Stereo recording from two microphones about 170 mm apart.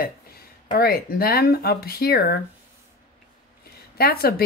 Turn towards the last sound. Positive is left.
turn(degrees=60)  # may be behind; listen again after turning